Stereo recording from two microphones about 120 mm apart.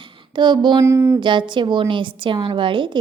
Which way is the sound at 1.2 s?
40° right (ahead or behind).